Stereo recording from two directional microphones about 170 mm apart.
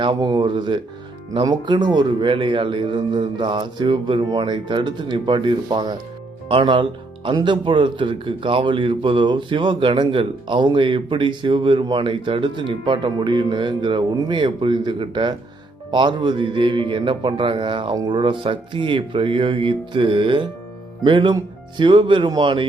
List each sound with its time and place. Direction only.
0.0 s speech: 30° right (ahead or behind)